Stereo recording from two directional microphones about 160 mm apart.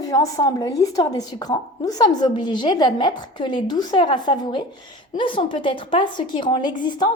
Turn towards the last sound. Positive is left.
turn(degrees=30)  # may be behind; listen again after turning